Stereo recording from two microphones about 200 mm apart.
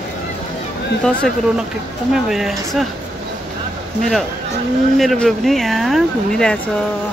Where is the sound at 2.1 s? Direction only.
Centre (ahead or behind).